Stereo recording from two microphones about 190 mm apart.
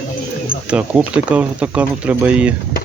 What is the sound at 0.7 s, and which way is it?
Speech, 5° right (ahead or behind).